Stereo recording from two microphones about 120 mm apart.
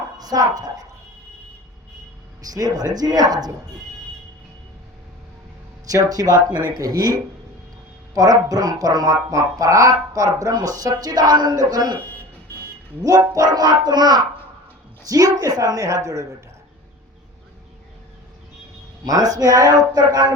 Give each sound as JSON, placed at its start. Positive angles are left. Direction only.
{"t": 0.2, "sound": "speech", "side_deg": -35}
{"t": 2.4, "sound": "speech", "side_deg": -30}
{"t": 5.8, "sound": "speech", "side_deg": -30}
{"t": 11.9, "sound": "speech", "side_deg": 15}
{"t": 13.0, "sound": "a woman's voice", "side_deg": -30}
{"t": 19.0, "sound": "speech", "side_deg": -30}